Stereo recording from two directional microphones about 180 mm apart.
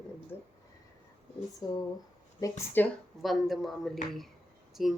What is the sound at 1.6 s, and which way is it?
Speech, 20° left (ahead or behind).